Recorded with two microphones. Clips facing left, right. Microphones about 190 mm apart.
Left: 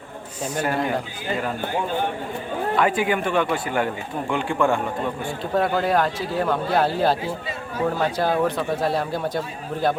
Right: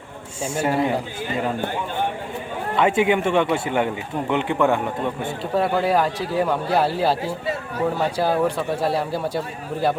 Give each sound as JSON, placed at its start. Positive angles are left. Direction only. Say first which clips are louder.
{"t": 0.5, "sound": "speech", "louder": "right 3 dB", "side_deg": -10}
{"t": 2.7, "sound": "a man's voice", "louder": "right 4 dB", "side_deg": -25}
{"t": 5.5, "sound": "speech", "louder": "right 1 dB", "side_deg": -5}